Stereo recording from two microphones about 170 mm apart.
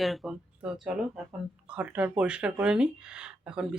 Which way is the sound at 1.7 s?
10° right (ahead or behind).